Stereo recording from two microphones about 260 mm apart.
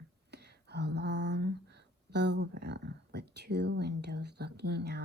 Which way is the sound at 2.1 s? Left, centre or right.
Right.